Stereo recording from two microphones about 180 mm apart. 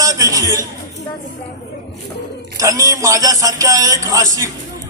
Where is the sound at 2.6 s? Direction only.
20° right (ahead or behind).